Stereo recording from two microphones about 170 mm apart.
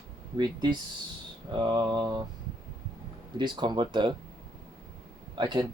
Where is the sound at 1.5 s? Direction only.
25° right (ahead or behind).